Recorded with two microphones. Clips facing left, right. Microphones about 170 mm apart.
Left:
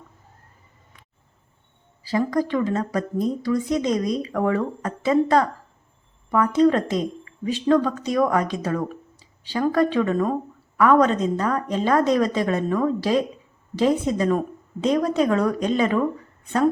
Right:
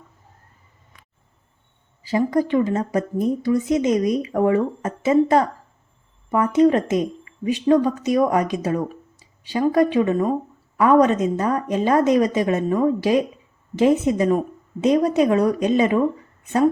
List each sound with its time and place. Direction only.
2.0 s a woman's voice: 20° right (ahead or behind)